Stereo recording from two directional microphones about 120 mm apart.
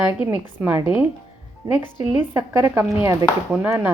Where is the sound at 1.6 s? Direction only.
20° right (ahead or behind).